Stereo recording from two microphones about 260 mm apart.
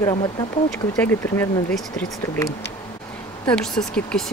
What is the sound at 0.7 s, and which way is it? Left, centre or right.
Speech, centre.